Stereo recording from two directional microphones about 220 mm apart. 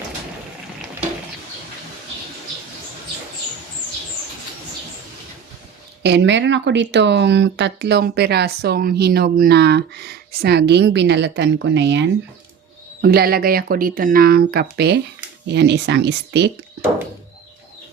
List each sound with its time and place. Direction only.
6.0 s speech: 50° right (ahead or behind)